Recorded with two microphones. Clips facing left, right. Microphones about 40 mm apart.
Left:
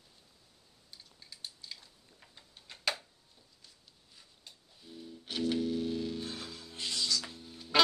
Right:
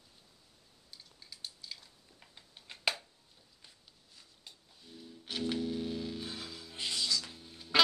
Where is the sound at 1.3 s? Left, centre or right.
Centre.